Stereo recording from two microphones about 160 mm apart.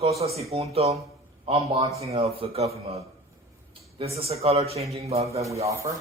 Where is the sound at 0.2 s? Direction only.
40° right (ahead or behind).